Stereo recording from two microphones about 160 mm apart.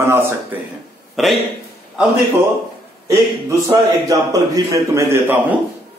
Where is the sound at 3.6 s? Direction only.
20° right (ahead or behind).